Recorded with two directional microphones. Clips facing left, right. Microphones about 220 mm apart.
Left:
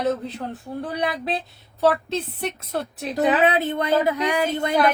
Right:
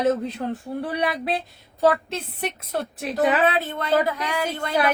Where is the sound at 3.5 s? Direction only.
20° left (ahead or behind).